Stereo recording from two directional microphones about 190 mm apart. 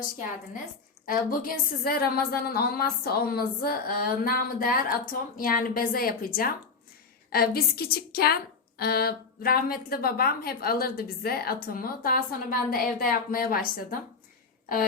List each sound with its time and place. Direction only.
1.0 s a woman's voice: 50° left (ahead or behind)